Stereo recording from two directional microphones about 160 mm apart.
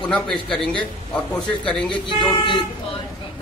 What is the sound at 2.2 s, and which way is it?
Speech, 30° left (ahead or behind).